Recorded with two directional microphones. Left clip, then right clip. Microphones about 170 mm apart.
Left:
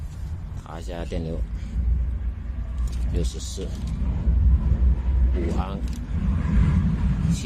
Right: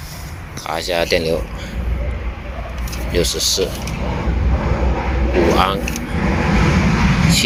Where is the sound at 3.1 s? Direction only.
25° left (ahead or behind).